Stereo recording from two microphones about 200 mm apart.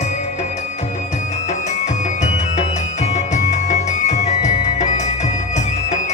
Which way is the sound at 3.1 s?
35° left (ahead or behind).